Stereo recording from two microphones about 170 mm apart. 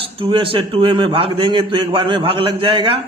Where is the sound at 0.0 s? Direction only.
30° right (ahead or behind).